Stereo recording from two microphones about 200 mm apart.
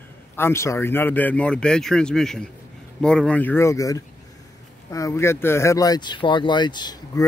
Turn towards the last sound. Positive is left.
turn(degrees=20)  # may be behind; listen again after turning